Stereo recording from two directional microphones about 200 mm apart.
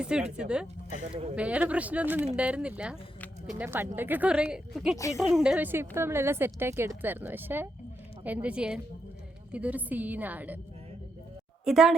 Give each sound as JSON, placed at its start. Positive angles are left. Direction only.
{"t": 0.0, "sound": "a woman's voice", "side_deg": -5}
{"t": 4.9, "sound": "speech", "side_deg": 15}
{"t": 5.2, "sound": "a woman's voice", "side_deg": -5}
{"t": 11.6, "sound": "speech", "side_deg": 0}